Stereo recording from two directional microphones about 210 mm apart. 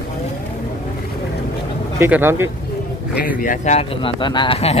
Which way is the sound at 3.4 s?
35° left (ahead or behind).